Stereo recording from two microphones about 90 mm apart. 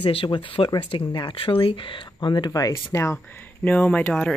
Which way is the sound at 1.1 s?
55° left (ahead or behind).